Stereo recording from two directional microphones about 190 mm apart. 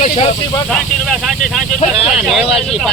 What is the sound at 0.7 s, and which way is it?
Speech, centre (ahead or behind).